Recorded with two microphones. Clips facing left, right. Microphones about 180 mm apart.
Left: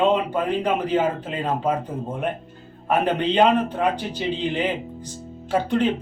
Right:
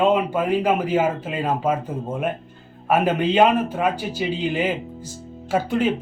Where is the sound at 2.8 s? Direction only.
5° right (ahead or behind).